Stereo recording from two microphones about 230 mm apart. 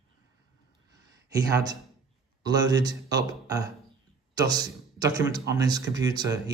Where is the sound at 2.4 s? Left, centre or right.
Centre.